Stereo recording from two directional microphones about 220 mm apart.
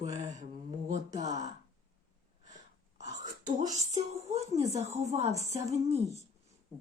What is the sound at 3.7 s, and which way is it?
Speech, 30° right (ahead or behind).